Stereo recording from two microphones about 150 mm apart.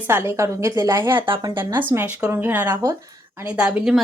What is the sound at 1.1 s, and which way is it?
Speech, 35° right (ahead or behind).